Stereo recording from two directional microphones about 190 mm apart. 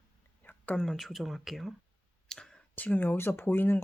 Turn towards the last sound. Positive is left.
turn(degrees=10)  # may be behind; listen again after turning